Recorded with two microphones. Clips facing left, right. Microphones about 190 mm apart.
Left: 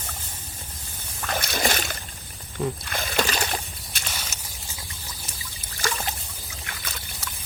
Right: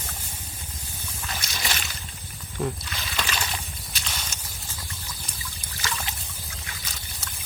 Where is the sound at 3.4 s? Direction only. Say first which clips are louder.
Left 4 dB; 55° left (ahead or behind).